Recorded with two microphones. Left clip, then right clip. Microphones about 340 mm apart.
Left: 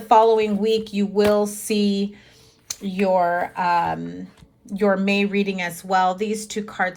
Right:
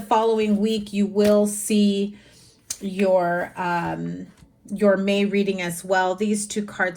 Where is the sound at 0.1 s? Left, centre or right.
Left.